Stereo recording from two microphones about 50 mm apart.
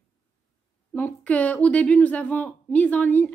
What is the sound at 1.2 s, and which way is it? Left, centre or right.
A woman's voice, left.